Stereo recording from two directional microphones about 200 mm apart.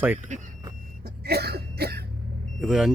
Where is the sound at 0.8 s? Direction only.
50° right (ahead or behind).